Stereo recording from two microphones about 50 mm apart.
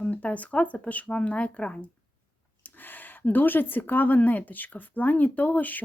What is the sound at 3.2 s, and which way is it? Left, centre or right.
Speech, left.